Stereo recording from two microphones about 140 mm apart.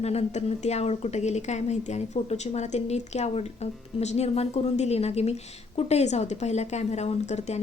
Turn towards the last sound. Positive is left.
turn(degrees=50)  # may be behind; listen again after turning